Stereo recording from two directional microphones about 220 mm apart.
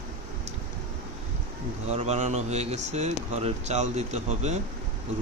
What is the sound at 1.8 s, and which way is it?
Speech, 30° right (ahead or behind).